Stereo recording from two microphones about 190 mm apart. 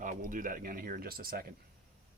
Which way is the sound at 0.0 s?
45° right (ahead or behind).